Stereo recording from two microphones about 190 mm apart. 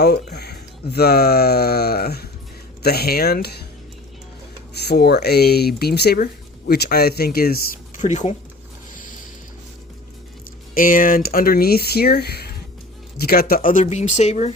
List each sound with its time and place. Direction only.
0.0 s speech: 60° left (ahead or behind)
4.7 s speech: 60° left (ahead or behind); by 8.4 s 40° left (ahead or behind)
10.8 s speech: 45° left (ahead or behind)